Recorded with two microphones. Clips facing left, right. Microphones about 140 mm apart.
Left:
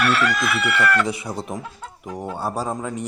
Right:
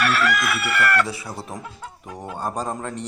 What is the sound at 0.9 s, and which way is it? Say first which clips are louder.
Speech: left 1 dB; 20° left (ahead or behind).